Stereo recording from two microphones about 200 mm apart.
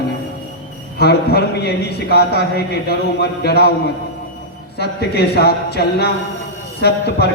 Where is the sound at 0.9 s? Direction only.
50° left (ahead or behind).